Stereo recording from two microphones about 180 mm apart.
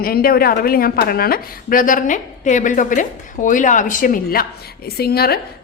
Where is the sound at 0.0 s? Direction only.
55° left (ahead or behind).